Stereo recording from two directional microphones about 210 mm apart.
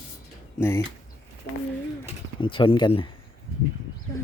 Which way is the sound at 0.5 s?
10° left (ahead or behind).